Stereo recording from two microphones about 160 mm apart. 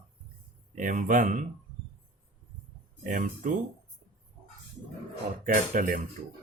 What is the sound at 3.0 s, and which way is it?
Speech, 55° right (ahead or behind).